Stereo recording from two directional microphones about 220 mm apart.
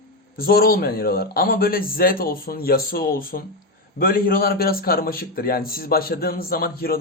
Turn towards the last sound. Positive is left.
turn(degrees=45)  # may be behind; listen again after turning